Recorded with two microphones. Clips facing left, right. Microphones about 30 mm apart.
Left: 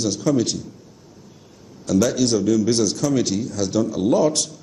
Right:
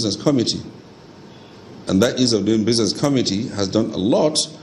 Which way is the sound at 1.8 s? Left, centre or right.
Right.